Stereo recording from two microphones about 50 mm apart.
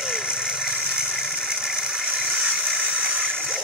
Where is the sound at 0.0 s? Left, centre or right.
Centre.